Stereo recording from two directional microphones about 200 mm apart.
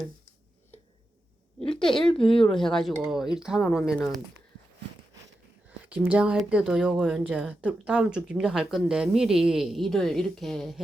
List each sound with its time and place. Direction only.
1.7 s speech: 5° left (ahead or behind)
2.1 s a woman's voice: 25° left (ahead or behind)
2.4 s speech: centre (ahead or behind)
5.9 s speech: 5° right (ahead or behind)